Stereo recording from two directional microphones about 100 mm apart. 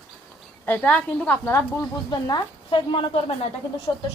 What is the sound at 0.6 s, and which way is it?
Speech, 15° left (ahead or behind).